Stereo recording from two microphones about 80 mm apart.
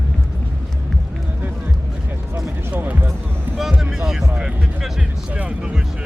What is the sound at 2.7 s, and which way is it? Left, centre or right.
Music, right.